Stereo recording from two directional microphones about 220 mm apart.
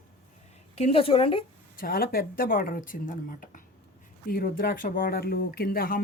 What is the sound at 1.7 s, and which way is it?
Speech, 40° left (ahead or behind).